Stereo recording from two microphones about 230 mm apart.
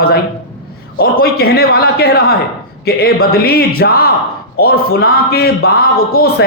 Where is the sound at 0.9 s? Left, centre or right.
Left.